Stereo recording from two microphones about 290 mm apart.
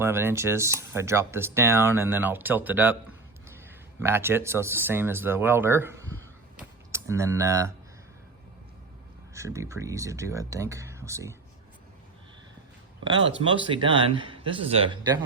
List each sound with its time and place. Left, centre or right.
0.0 s speech: centre
9.3 s speech: centre
13.5 s speech: centre